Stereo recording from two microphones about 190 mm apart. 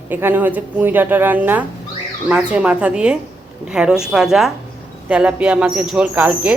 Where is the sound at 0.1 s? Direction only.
10° right (ahead or behind).